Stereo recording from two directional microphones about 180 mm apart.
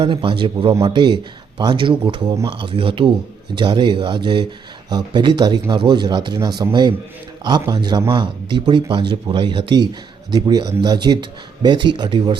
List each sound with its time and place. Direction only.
0.0 s speech: 30° right (ahead or behind)